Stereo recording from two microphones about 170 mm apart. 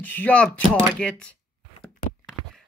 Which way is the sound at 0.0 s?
10° left (ahead or behind).